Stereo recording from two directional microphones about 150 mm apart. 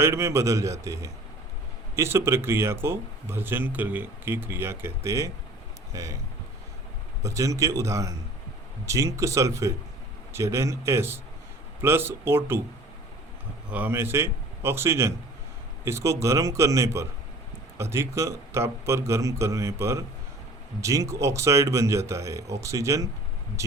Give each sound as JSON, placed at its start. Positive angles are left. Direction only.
{"t": 0.0, "sound": "a man's voice", "side_deg": -20}
{"t": 7.2, "sound": "a man's voice", "side_deg": -20}
{"t": 13.7, "sound": "a man's voice", "side_deg": -10}